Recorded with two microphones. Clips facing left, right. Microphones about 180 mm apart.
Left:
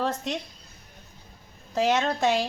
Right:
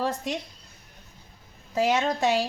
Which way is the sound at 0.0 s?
10° right (ahead or behind).